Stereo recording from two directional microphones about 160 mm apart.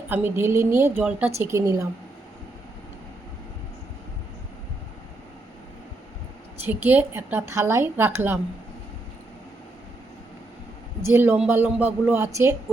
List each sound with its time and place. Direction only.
0.1 s a woman's voice: 10° right (ahead or behind)
6.7 s a woman's voice: 10° right (ahead or behind)
11.0 s a woman's voice: 15° right (ahead or behind)